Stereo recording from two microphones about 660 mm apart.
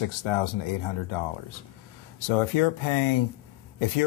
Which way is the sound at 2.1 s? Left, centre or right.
Left.